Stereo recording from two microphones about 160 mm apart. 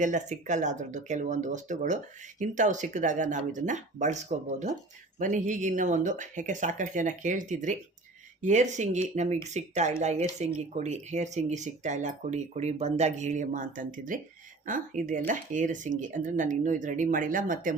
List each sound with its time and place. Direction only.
0.0 s speech: 50° right (ahead or behind)